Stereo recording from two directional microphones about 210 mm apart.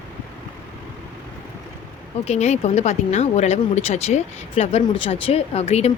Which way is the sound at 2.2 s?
30° left (ahead or behind).